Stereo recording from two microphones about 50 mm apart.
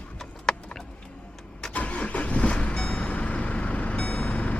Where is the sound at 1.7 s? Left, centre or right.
Left.